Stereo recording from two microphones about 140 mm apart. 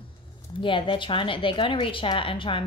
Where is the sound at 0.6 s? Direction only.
35° left (ahead or behind).